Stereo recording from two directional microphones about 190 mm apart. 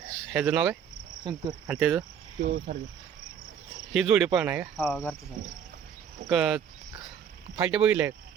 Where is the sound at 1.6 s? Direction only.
5° right (ahead or behind).